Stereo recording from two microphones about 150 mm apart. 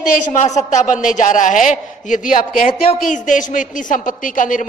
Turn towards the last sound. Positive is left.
turn(degrees=60)  # may be behind; listen again after turning